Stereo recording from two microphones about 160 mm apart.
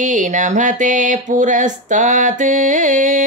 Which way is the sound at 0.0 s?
55° right (ahead or behind).